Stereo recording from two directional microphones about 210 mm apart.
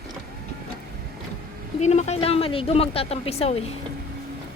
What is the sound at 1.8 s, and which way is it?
Speech, 30° left (ahead or behind).